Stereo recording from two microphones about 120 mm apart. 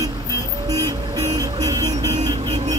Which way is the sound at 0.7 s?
30° right (ahead or behind).